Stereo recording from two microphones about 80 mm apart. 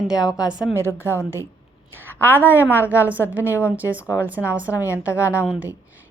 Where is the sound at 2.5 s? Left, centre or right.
Left.